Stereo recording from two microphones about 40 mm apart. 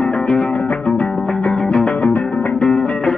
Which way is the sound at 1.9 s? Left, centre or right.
Left.